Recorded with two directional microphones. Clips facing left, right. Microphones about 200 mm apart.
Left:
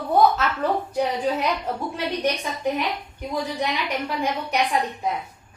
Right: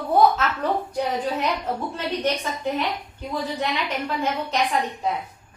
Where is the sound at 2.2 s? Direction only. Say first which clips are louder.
Left 1 dB; 15° left (ahead or behind).